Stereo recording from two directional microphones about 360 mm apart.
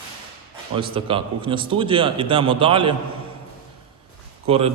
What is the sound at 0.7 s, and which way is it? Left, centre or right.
A man's voice, centre.